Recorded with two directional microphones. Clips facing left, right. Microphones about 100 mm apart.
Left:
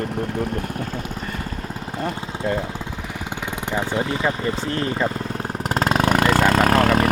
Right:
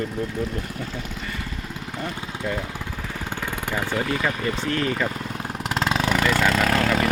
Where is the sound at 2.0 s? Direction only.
30° left (ahead or behind).